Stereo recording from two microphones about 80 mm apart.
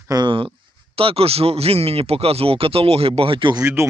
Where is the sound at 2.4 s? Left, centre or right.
Right.